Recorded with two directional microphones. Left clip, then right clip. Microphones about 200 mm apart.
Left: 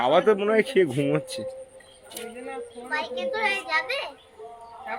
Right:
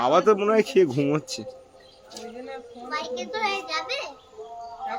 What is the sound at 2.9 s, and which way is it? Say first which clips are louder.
A child's voice: left 2 dB; 5° right (ahead or behind).